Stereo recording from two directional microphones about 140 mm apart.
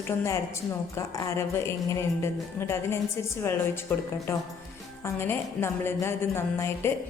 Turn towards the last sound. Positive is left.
turn(degrees=20)  # may be behind; listen again after turning